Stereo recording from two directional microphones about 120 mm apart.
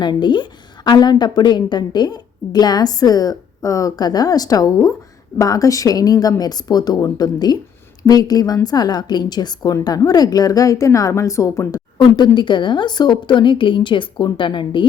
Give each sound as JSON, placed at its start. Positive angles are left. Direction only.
{"t": 0.0, "sound": "a woman's voice", "side_deg": 40}
{"t": 11.9, "sound": "a woman's voice", "side_deg": 40}